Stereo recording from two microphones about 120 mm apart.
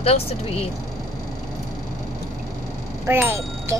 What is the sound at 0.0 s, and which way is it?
Speech, 55° left (ahead or behind).